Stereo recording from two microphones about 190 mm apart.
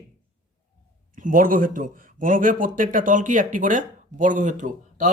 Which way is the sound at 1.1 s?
45° right (ahead or behind).